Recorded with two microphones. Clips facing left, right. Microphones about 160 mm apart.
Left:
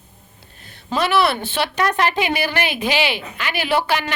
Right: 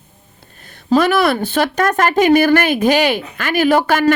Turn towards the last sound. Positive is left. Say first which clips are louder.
# right 7 dB
turn(degrees=-45)  # may be behind; listen again after turning